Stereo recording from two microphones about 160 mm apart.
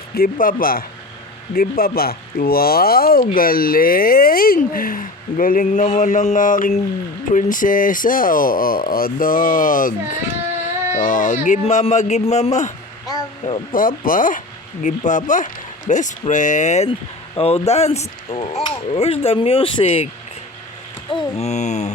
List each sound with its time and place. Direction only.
0.1 s speech: 65° left (ahead or behind); by 12.7 s 45° left (ahead or behind)
13.1 s a sound: 25° left (ahead or behind)
13.7 s speech: 60° left (ahead or behind); by 20.1 s 35° left (ahead or behind)
21.1 s speech: 35° left (ahead or behind)